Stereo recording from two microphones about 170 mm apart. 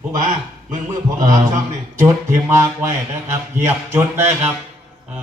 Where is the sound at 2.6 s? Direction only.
15° right (ahead or behind).